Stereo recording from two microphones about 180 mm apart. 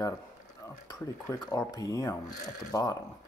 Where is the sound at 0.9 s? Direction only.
20° left (ahead or behind).